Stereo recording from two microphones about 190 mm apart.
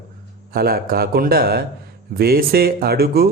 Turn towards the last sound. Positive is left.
turn(degrees=-55)  # may be behind; listen again after turning